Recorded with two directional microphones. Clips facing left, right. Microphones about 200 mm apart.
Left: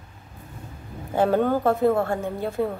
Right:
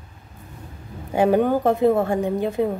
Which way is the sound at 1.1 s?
15° right (ahead or behind).